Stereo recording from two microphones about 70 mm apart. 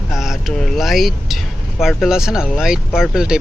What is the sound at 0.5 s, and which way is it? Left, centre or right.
Speech, centre.